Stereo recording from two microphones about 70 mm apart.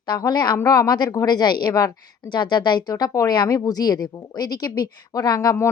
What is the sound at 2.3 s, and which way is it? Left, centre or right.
Speech, left.